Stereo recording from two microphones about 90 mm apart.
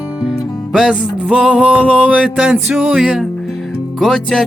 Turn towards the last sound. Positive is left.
turn(degrees=0)  # may be behind; listen again after turning